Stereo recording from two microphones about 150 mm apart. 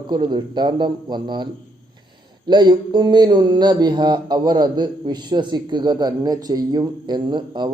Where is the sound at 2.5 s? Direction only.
30° right (ahead or behind).